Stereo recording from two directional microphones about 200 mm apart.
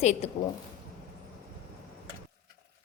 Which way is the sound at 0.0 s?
35° left (ahead or behind).